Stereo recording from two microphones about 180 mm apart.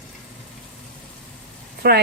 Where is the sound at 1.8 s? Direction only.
60° right (ahead or behind).